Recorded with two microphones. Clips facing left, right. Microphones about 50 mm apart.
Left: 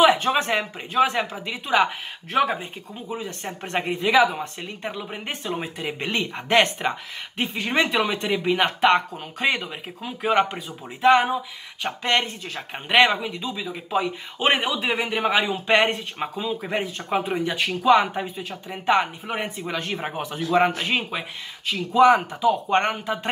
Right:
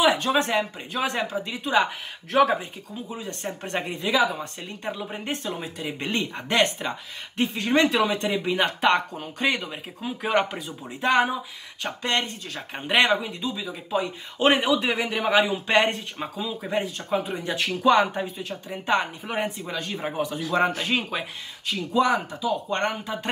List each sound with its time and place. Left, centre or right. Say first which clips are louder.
0.0 s a sound: left 3 dB; left
0.5 s speech: even; centre
8.8 s speech: left 4 dB; centre
11.8 s speech: left 3 dB; left
12.5 s speech: left 3 dB; centre
15.7 s speech: left 3 dB; left
17.6 s speech: left 1 dB; centre
19.8 s speech: even; left
20.7 s speech: left 1 dB; centre; by 23.1 s left